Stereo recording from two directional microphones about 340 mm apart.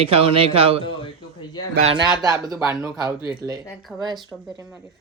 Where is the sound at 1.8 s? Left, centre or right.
Centre.